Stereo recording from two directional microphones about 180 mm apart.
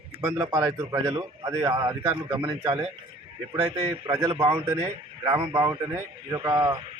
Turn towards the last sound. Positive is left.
turn(degrees=-20)  # may be behind; listen again after turning